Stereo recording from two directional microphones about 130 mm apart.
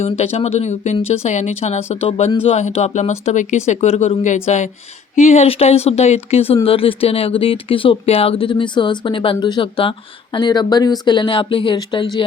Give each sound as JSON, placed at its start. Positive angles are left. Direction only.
{"t": 0.0, "sound": "speech", "side_deg": 55}